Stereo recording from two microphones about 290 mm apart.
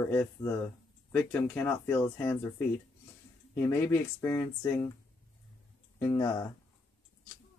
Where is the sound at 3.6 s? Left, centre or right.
Centre.